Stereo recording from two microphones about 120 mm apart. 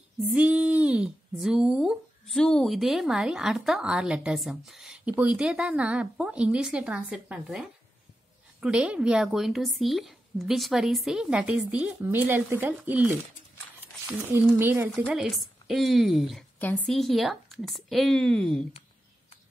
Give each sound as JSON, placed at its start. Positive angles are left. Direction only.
{"t": 0.2, "sound": "speech", "side_deg": -10}
{"t": 14.6, "sound": "speech", "side_deg": -20}
{"t": 15.1, "sound": "speech", "side_deg": 0}
{"t": 16.5, "sound": "a woman's voice", "side_deg": 15}
{"t": 16.8, "sound": "speech", "side_deg": 0}